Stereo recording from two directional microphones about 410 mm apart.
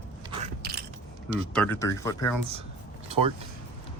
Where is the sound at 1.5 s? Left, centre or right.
Centre.